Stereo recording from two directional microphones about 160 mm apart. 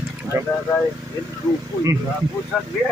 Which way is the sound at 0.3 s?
15° right (ahead or behind).